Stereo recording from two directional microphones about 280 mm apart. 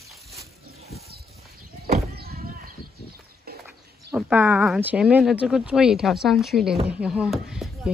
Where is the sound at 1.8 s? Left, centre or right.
Right.